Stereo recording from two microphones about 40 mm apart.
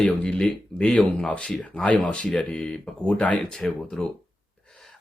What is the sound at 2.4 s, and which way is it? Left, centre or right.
Speech, left.